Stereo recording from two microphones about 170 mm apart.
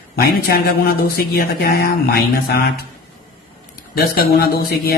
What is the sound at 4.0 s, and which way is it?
Speech, 65° left (ahead or behind).